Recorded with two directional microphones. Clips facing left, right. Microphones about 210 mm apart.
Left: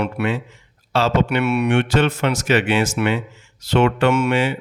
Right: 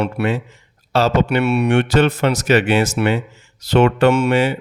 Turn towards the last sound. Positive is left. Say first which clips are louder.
# right 3 dB
turn(degrees=-40)  # may be behind; listen again after turning